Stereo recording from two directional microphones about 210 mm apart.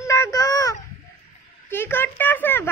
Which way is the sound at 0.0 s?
15° left (ahead or behind).